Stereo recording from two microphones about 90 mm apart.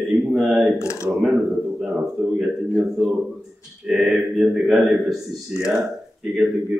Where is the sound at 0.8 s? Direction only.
35° left (ahead or behind).